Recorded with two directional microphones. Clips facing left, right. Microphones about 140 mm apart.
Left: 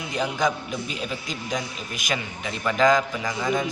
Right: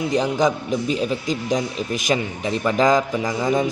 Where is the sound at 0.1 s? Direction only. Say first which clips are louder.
Right 4 dB; 40° right (ahead or behind).